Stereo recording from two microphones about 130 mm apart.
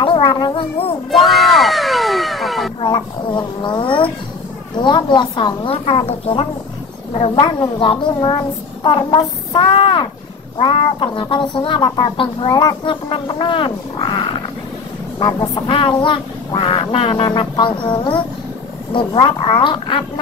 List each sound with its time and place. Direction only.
0.0 s speech: 40° left (ahead or behind)
1.1 s a sound: centre (ahead or behind)
2.8 s speech: 35° left (ahead or behind)